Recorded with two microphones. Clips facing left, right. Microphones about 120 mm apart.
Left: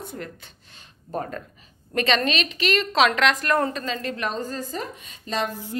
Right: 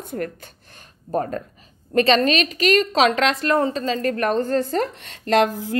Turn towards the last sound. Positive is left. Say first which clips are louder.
# right 9 dB
turn(degrees=-90)